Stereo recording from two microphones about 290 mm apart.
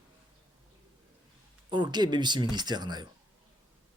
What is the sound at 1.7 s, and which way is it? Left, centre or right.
Speech, centre.